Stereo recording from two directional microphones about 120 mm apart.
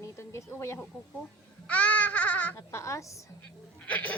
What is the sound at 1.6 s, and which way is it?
Babbling, 10° left (ahead or behind).